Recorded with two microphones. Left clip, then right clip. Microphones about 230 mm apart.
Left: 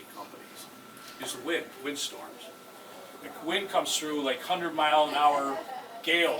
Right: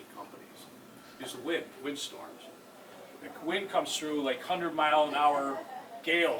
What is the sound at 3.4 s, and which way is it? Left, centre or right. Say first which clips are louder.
A man's voice: left 3 dB; centre.